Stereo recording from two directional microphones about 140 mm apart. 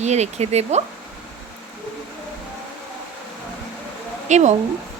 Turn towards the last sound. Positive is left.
turn(degrees=-55)  # may be behind; listen again after turning